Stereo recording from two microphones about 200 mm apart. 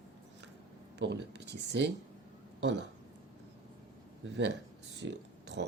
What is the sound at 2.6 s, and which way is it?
Speech, 65° right (ahead or behind).